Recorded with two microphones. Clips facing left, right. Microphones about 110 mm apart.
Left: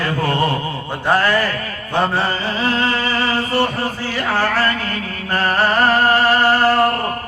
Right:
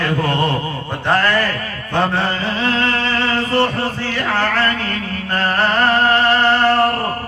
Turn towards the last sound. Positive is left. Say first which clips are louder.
# even
turn(degrees=10)  # may be behind; listen again after turning